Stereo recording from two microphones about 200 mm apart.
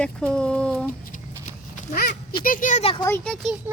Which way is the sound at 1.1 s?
40° left (ahead or behind).